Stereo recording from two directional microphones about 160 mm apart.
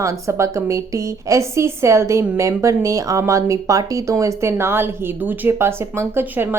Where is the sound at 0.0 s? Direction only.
20° right (ahead or behind).